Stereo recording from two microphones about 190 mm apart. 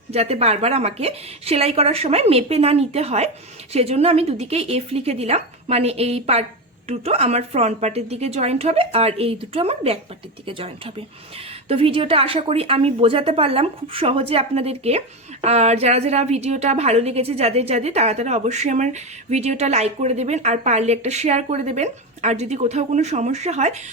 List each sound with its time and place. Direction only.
0.1 s a woman's voice: 35° right (ahead or behind)